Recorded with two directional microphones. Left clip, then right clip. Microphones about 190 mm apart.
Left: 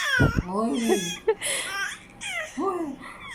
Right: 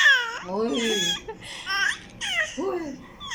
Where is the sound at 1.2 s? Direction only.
45° left (ahead or behind).